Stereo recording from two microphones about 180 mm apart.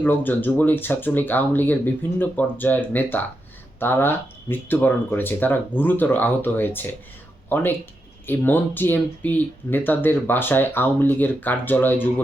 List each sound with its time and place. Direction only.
0.0 s speech: 10° left (ahead or behind)